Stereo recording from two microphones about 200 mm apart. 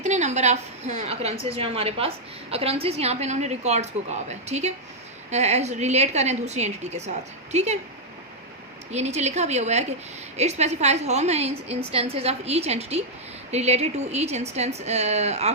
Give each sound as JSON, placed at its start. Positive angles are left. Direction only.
{"t": 0.0, "sound": "a woman's voice", "side_deg": -35}
{"t": 8.9, "sound": "a woman's voice", "side_deg": -35}